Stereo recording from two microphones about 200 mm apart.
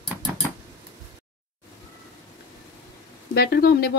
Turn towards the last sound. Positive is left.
turn(degrees=50)  # may be behind; listen again after turning